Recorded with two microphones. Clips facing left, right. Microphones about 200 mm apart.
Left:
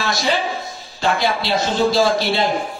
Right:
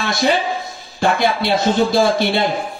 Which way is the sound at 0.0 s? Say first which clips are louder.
Right 3 dB; 55° right (ahead or behind).